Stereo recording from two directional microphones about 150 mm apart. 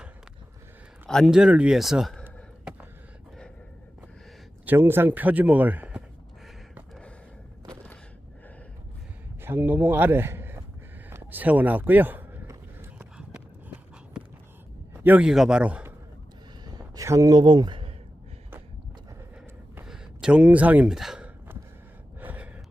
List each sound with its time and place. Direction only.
1.0 s a man's voice: centre (ahead or behind)
4.6 s speech: 15° right (ahead or behind)
9.4 s a man's voice: 15° right (ahead or behind)
11.1 s a sound: 15° right (ahead or behind)
13.0 s horse: 5° right (ahead or behind)
14.9 s a man's voice: 10° right (ahead or behind)
16.6 s a sound: 25° right (ahead or behind)
19.7 s speech: 5° right (ahead or behind)
22.2 s gasp: 10° right (ahead or behind)